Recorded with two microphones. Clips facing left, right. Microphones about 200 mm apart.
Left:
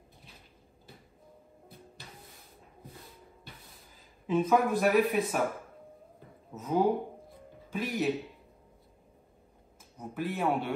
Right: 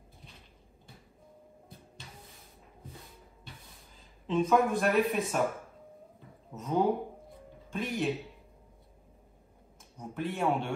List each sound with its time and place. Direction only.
4.3 s speech: 5° left (ahead or behind)
6.5 s music: 5° left (ahead or behind)
9.9 s speech: 5° left (ahead or behind)